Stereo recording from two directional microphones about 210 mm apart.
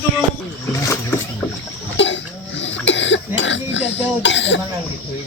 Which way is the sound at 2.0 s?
60° left (ahead or behind).